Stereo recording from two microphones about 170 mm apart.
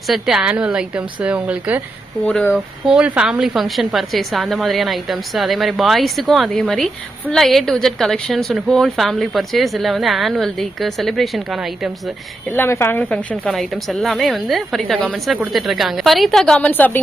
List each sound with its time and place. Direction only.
0.1 s a woman's voice: centre (ahead or behind)
2.2 s speech: 10° left (ahead or behind)
2.5 s a woman's voice: 5° right (ahead or behind)
12.5 s a woman's voice: 15° left (ahead or behind)